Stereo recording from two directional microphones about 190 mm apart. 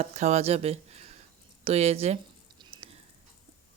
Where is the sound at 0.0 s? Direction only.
35° right (ahead or behind).